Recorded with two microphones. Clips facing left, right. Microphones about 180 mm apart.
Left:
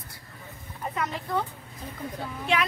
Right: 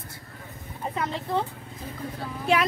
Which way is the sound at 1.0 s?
30° right (ahead or behind).